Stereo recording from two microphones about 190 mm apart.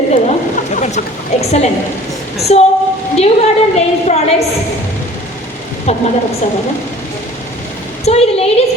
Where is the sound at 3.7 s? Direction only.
35° left (ahead or behind).